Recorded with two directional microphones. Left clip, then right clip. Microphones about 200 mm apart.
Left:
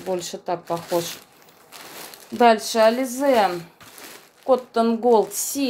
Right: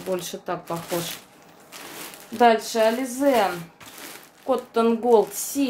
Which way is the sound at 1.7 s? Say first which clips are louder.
Right 1 dB; 30° left (ahead or behind).